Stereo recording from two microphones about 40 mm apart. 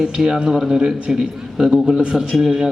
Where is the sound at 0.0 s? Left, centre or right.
Centre.